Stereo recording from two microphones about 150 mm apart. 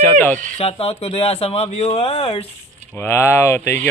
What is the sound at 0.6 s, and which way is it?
Speech, 40° left (ahead or behind).